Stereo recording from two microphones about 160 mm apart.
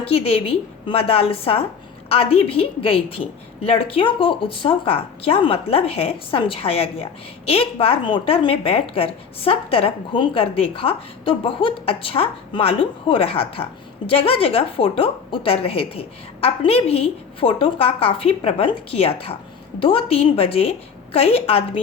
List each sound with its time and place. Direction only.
0.0 s a woman's voice: 35° left (ahead or behind)